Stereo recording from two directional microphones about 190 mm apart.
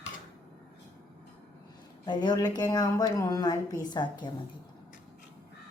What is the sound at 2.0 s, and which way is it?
Speech, 25° left (ahead or behind).